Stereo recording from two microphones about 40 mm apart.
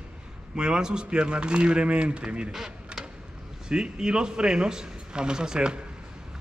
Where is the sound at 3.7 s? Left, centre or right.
Right.